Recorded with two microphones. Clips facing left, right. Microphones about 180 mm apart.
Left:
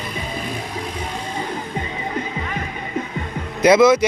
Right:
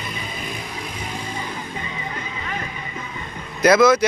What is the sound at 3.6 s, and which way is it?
Speech, 25° left (ahead or behind).